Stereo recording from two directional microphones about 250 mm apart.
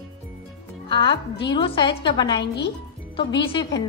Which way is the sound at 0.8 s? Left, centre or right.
Centre.